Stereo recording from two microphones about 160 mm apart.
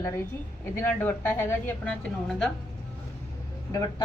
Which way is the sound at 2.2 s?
5° left (ahead or behind).